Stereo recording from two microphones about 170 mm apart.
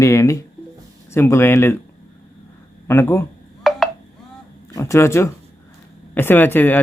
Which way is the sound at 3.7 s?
Centre (ahead or behind).